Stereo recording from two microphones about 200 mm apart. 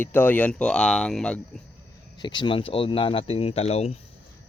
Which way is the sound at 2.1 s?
20° left (ahead or behind).